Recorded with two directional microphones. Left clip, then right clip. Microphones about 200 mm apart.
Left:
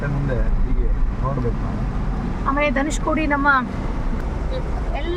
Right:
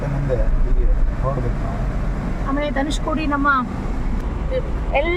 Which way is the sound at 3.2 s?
25° left (ahead or behind).